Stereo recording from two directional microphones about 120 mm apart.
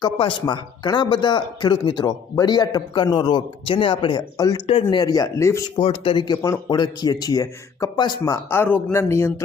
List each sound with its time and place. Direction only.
0.0 s speech: 40° left (ahead or behind)
4.4 s speech: 30° left (ahead or behind)
4.6 s speech: 45° left (ahead or behind); by 5.6 s 25° left (ahead or behind)
5.7 s speech: 50° left (ahead or behind)
8.4 s speech: 15° left (ahead or behind)